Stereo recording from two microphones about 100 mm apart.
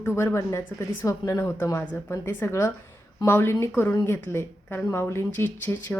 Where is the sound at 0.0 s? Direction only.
25° left (ahead or behind).